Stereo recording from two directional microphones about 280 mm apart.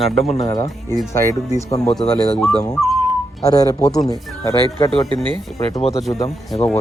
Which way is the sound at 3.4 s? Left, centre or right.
Centre.